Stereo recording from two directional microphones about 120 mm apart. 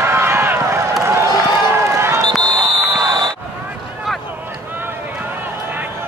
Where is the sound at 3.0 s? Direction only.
35° right (ahead or behind).